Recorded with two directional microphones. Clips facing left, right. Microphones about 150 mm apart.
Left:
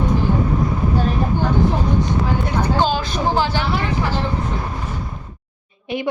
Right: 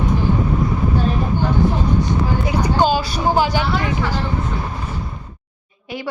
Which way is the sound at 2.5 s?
10° right (ahead or behind).